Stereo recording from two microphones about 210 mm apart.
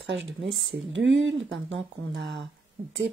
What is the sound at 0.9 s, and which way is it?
Speech, 60° right (ahead or behind).